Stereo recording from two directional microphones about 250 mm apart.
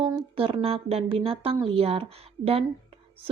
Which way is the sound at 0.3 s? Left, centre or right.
Right.